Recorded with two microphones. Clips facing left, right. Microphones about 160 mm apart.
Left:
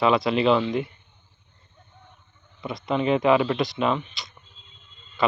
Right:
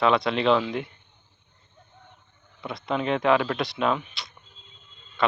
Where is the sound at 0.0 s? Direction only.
Centre (ahead or behind).